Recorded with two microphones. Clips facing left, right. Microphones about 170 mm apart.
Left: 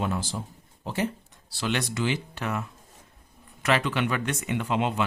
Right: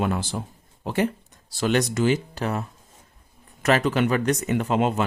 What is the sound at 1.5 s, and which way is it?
Speech, 45° right (ahead or behind).